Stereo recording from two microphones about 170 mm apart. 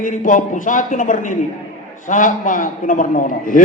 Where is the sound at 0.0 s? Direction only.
50° left (ahead or behind).